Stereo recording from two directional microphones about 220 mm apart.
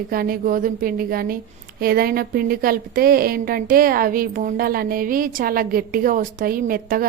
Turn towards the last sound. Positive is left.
turn(degrees=-40)  # may be behind; listen again after turning